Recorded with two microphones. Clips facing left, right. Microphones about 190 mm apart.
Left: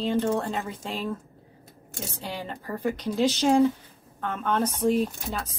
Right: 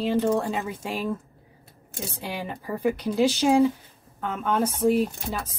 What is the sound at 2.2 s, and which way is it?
A woman's voice, 10° right (ahead or behind).